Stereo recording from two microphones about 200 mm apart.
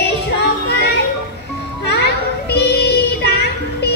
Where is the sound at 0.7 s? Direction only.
55° left (ahead or behind).